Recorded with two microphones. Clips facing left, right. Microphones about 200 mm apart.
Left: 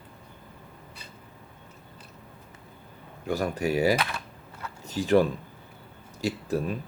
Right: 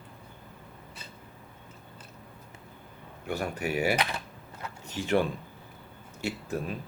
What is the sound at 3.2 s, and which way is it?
Speech, 40° left (ahead or behind).